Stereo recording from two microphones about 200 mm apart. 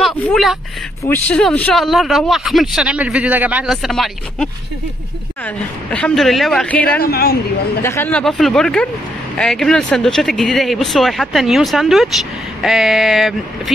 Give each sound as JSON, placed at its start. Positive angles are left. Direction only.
{"t": 0.0, "sound": "a sound", "side_deg": 0}
{"t": 1.0, "sound": "speech", "side_deg": 10}
{"t": 7.0, "sound": "speech", "side_deg": 50}
{"t": 7.8, "sound": "speech", "side_deg": 10}